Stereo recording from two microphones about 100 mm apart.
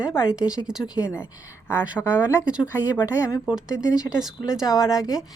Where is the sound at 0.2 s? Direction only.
10° right (ahead or behind).